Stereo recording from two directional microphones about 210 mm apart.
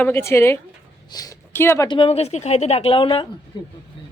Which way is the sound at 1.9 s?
25° left (ahead or behind).